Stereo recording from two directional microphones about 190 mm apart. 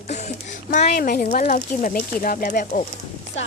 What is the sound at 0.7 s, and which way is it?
Speech, 40° left (ahead or behind).